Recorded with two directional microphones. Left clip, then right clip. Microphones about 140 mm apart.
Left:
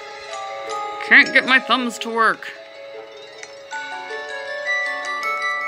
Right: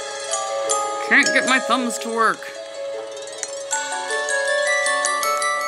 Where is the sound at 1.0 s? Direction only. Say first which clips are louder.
Left 5 dB; 15° right (ahead or behind).